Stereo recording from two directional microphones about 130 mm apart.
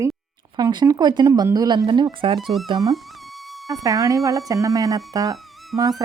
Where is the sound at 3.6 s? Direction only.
25° right (ahead or behind).